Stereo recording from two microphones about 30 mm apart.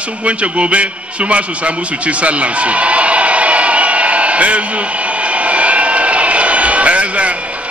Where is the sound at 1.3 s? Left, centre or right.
Right.